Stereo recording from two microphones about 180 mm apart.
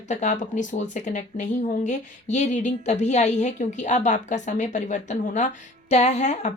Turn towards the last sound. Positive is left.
turn(degrees=40)  # may be behind; listen again after turning